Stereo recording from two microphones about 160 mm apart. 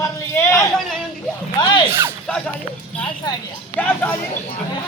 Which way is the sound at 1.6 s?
25° left (ahead or behind).